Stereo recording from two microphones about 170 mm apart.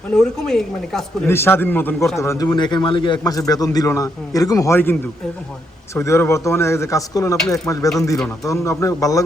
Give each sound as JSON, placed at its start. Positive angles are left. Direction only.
{"t": 0.1, "sound": "a woman's voice", "side_deg": 5}
{"t": 1.3, "sound": "a man's voice", "side_deg": 15}